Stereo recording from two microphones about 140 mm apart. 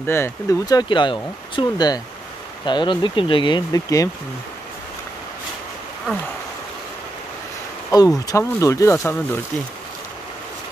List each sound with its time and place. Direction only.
0.0 s speech: 15° left (ahead or behind)
8.3 s speech: 20° left (ahead or behind)